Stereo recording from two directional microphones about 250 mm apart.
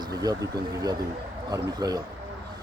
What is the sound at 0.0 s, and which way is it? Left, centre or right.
Speech, centre.